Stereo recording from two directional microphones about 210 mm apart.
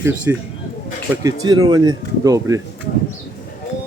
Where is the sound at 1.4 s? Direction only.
20° right (ahead or behind).